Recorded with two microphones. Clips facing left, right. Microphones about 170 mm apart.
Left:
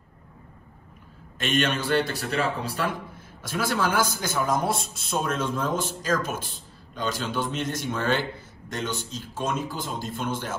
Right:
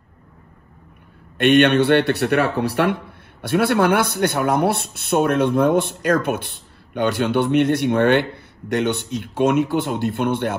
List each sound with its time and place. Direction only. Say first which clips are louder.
1.4 s a man's voice: right 11 dB; 65° right (ahead or behind)